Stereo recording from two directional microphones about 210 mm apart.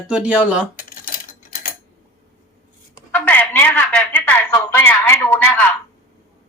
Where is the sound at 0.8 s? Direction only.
45° left (ahead or behind).